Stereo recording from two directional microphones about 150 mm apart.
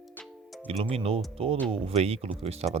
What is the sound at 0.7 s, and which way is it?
Speech, 40° right (ahead or behind).